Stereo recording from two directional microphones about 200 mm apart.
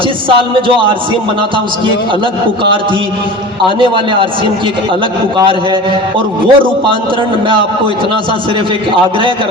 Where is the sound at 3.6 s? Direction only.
25° right (ahead or behind).